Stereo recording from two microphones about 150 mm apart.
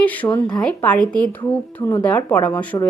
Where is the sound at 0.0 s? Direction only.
10° left (ahead or behind).